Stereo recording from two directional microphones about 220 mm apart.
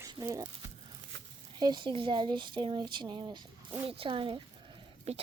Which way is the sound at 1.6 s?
20° right (ahead or behind).